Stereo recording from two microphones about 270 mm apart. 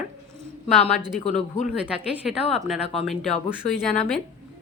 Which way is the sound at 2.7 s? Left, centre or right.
Centre.